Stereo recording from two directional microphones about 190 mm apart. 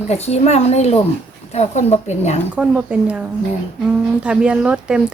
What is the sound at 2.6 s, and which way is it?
Speech, 5° right (ahead or behind).